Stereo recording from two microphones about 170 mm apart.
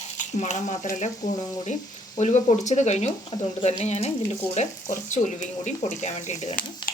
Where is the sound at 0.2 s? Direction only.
45° left (ahead or behind).